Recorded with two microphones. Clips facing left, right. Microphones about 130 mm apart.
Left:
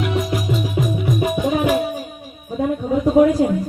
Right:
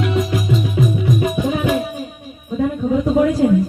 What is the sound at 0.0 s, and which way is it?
Music, 5° left (ahead or behind).